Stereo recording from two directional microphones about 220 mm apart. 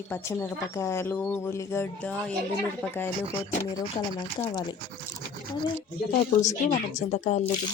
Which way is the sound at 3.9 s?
20° left (ahead or behind).